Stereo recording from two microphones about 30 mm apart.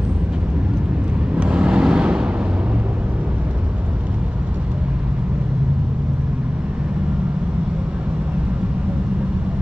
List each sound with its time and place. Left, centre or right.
1.3 s vehicle: right